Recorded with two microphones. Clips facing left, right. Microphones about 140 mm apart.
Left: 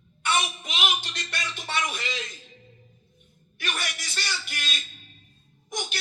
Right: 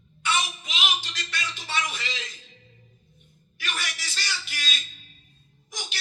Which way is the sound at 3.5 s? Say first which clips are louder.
Left 1 dB; 55° left (ahead or behind).